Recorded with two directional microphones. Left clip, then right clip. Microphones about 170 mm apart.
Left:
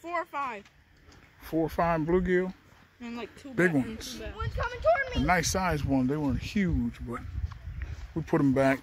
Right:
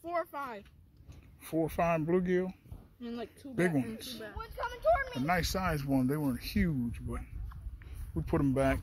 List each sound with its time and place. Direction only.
0.0 s a sound: 5° left (ahead or behind)
1.4 s speech: 10° left (ahead or behind)
4.4 s speech: 5° right (ahead or behind)
5.2 s a man's voice: 15° left (ahead or behind)